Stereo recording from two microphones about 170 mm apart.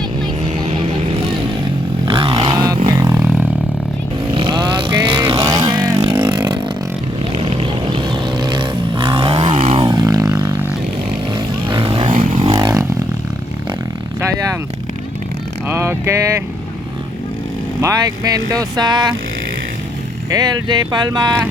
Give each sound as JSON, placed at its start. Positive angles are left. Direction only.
{"t": 2.0, "sound": "a sound", "side_deg": -30}
{"t": 3.2, "sound": "a sound", "side_deg": -10}
{"t": 4.4, "sound": "vehicle", "side_deg": -25}
{"t": 5.3, "sound": "music", "side_deg": -20}
{"t": 6.0, "sound": "vehicle", "side_deg": -25}
{"t": 8.1, "sound": "vehicle", "side_deg": -25}
{"t": 14.2, "sound": "vehicle", "side_deg": -15}
{"t": 15.6, "sound": "vehicle", "side_deg": -10}
{"t": 17.7, "sound": "speech", "side_deg": -20}
{"t": 20.3, "sound": "speech", "side_deg": -25}